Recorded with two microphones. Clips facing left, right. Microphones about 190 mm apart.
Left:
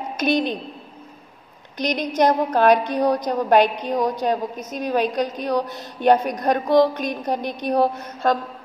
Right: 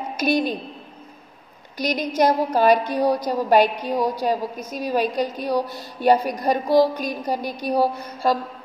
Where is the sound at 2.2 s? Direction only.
5° right (ahead or behind).